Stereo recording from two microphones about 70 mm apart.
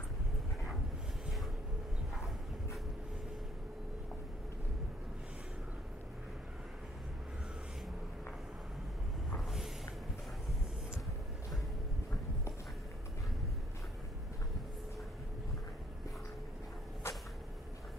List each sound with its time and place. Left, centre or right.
17.0 s vehicle: left